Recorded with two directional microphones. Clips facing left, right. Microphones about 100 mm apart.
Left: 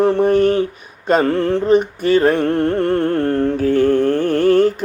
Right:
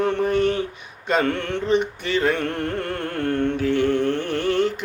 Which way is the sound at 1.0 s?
35° left (ahead or behind).